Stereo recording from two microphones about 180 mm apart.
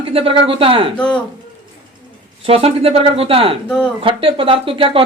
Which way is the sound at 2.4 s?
35° right (ahead or behind).